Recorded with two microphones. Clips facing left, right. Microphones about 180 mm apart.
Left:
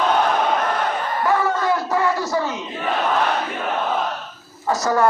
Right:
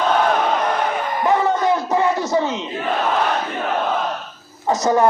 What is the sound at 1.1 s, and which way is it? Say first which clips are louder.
Crowd: right 2 dB; 20° right (ahead or behind).